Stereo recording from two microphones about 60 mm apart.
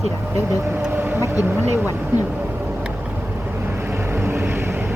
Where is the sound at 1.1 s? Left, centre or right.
Right.